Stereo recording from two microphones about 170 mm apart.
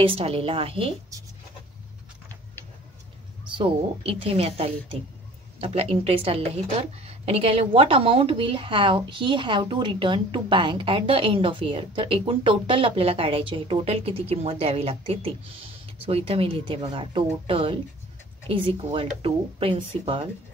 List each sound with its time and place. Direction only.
0.0 s a woman's voice: 35° right (ahead or behind)
3.5 s a woman's voice: 30° right (ahead or behind)